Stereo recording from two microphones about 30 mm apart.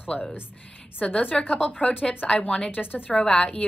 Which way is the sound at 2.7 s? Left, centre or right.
Left.